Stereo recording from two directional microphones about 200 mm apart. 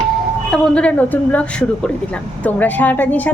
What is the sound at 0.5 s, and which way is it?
A woman's voice, 5° left (ahead or behind).